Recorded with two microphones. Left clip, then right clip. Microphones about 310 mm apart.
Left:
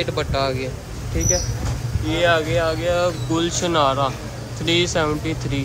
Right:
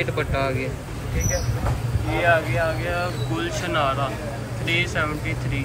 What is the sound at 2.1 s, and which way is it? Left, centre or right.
Speech, left.